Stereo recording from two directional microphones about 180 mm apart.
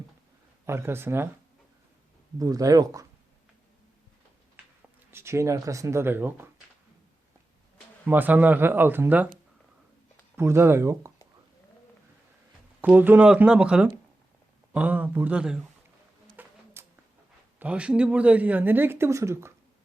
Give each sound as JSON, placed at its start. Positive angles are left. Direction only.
{"t": 0.6, "sound": "a woman's voice", "side_deg": -15}
{"t": 2.4, "sound": "speech", "side_deg": -20}
{"t": 5.1, "sound": "a woman's voice", "side_deg": -15}
{"t": 8.0, "sound": "a woman's voice", "side_deg": -10}
{"t": 10.3, "sound": "a woman's voice", "side_deg": -15}
{"t": 12.8, "sound": "a woman's voice", "side_deg": -10}
{"t": 16.3, "sound": "a sound", "side_deg": -10}
{"t": 17.6, "sound": "a woman's voice", "side_deg": -5}